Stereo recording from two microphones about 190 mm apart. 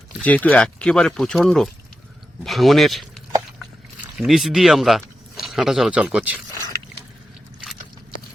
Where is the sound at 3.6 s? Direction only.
Centre (ahead or behind).